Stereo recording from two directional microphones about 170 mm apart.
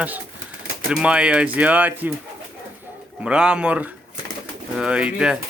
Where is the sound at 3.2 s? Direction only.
5° right (ahead or behind).